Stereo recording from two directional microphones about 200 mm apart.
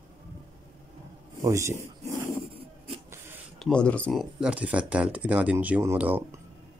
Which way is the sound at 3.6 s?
5° left (ahead or behind).